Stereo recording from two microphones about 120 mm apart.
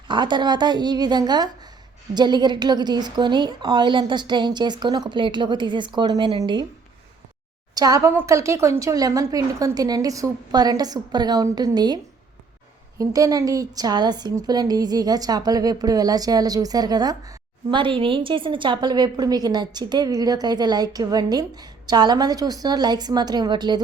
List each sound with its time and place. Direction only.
0.1 s a woman's voice: 40° right (ahead or behind)
7.8 s a woman's voice: 30° right (ahead or behind)
13.0 s a woman's voice: 30° right (ahead or behind)